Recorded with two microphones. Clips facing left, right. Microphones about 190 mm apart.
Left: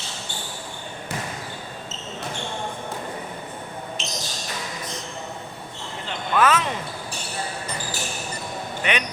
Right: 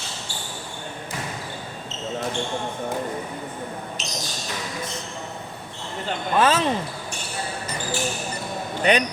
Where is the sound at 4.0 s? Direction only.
40° right (ahead or behind).